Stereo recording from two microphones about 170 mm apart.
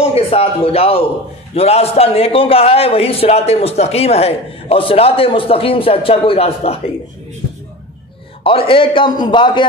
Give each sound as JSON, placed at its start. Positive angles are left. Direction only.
{"t": 0.0, "sound": "a man's voice", "side_deg": 35}
{"t": 8.5, "sound": "a man's voice", "side_deg": 30}